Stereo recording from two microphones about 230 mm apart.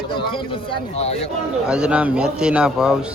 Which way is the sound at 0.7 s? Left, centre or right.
Left.